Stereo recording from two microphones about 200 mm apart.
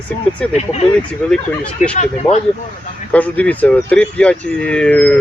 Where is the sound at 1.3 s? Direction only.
5° left (ahead or behind).